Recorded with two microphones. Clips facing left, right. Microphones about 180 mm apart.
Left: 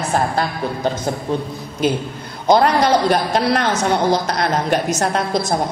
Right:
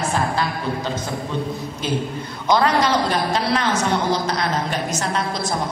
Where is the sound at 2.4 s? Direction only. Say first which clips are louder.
Left 4 dB; 45° left (ahead or behind).